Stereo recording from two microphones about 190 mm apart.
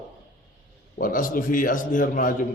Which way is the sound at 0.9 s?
45° left (ahead or behind).